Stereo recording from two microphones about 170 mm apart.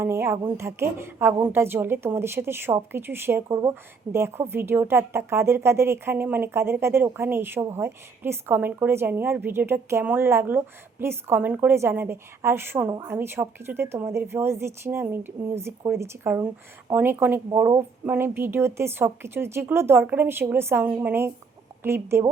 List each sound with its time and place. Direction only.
0.0 s a woman's voice: 15° right (ahead or behind)